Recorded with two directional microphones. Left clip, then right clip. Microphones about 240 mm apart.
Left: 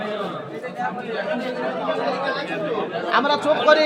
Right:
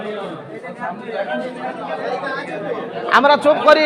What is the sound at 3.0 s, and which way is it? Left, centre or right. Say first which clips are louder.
Speech: right 7 dB; right.